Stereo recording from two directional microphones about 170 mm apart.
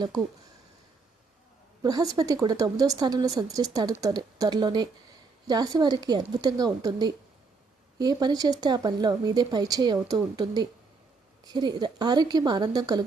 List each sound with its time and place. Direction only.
1.8 s speech: 20° right (ahead or behind)
7.9 s speech: 25° right (ahead or behind)